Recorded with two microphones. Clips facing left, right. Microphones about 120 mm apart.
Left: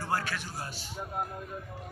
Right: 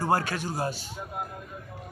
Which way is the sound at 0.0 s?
40° right (ahead or behind).